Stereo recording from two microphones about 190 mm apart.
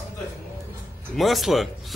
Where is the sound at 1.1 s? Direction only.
Centre (ahead or behind).